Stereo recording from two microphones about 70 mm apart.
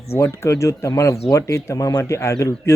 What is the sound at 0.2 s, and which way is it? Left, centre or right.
Speech, left.